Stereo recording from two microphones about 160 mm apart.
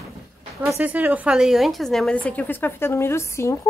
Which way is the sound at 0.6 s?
15° right (ahead or behind).